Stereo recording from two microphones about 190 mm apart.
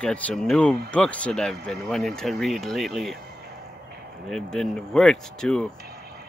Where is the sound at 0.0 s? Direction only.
5° left (ahead or behind).